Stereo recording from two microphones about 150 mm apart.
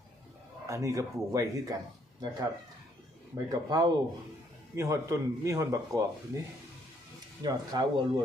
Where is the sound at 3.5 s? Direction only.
25° right (ahead or behind).